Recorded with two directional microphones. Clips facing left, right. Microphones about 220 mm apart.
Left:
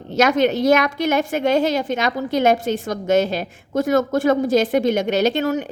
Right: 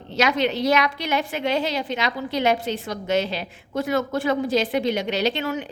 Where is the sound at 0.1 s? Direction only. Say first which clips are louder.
Left 5 dB; 45° left (ahead or behind).